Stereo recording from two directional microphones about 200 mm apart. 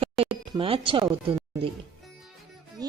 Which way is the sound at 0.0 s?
25° right (ahead or behind).